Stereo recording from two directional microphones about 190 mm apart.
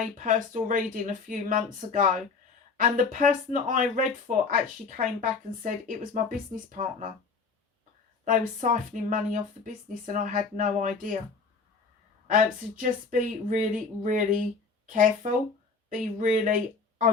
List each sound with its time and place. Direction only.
0.2 s speech: 45° right (ahead or behind)
8.2 s speech: 45° right (ahead or behind)
12.3 s speech: 45° right (ahead or behind)